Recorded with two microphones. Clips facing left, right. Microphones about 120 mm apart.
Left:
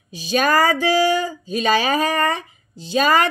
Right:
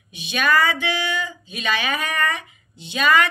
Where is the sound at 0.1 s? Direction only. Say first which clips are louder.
Left 3 dB; 35° left (ahead or behind).